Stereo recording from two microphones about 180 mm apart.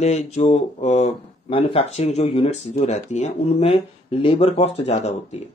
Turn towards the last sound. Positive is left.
turn(degrees=40)  # may be behind; listen again after turning